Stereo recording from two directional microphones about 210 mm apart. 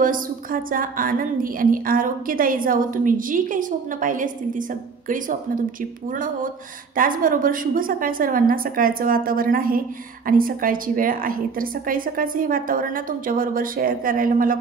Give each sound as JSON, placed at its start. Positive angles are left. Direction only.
{"t": 0.0, "sound": "a woman's voice", "side_deg": -40}